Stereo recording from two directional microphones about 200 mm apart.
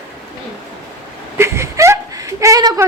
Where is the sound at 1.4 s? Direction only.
15° right (ahead or behind).